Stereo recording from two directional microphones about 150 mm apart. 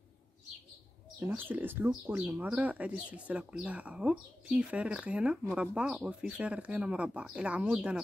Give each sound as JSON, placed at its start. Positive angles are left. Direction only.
{"t": 1.2, "sound": "speech", "side_deg": -10}